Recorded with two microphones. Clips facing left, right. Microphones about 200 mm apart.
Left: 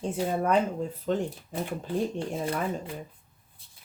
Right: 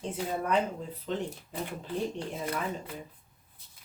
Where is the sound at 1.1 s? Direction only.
45° left (ahead or behind).